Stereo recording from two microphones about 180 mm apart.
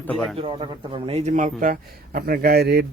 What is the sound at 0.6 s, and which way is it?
A man's voice, 30° right (ahead or behind).